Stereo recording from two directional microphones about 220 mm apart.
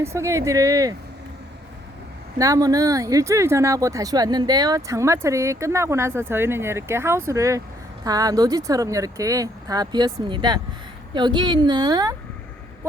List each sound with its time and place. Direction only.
0.0 s speech: 15° right (ahead or behind)
2.4 s a woman's voice: 15° right (ahead or behind)